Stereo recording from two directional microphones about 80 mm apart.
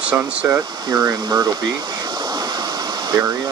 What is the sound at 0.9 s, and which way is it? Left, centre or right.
Speech, right.